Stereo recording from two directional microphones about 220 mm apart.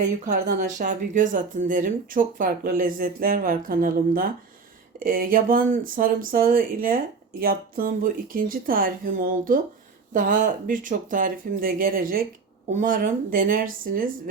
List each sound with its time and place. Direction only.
0.0 s speech: 35° right (ahead or behind)